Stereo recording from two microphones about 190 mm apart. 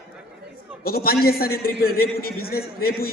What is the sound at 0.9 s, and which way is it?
A woman's voice, 50° left (ahead or behind).